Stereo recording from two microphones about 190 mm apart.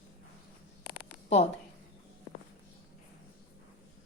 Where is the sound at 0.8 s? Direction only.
25° left (ahead or behind).